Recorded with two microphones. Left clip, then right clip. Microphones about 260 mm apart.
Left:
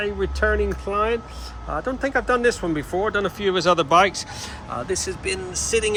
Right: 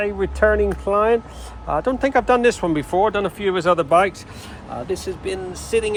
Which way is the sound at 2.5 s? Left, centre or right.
Centre.